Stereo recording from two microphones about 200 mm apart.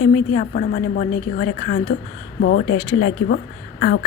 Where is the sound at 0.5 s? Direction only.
50° left (ahead or behind).